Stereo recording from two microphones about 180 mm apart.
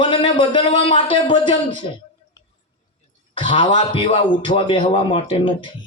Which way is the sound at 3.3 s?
25° left (ahead or behind).